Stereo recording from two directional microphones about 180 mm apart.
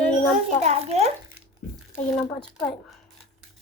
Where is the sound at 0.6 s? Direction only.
35° right (ahead or behind).